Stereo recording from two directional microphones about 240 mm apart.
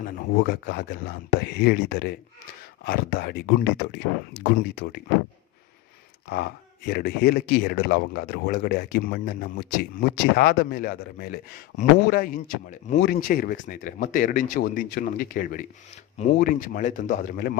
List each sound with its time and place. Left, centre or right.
0.0 s speech: left
6.2 s speech: left